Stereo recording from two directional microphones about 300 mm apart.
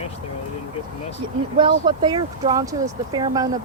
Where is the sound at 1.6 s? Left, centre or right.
Centre.